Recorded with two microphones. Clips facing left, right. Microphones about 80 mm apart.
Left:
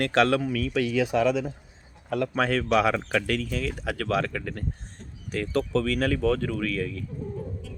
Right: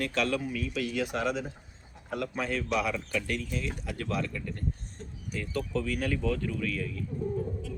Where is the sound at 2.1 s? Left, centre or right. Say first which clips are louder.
Left 7 dB; left.